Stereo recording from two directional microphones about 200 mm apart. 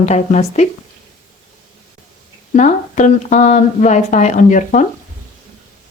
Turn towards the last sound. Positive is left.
turn(degrees=40)  # may be behind; listen again after turning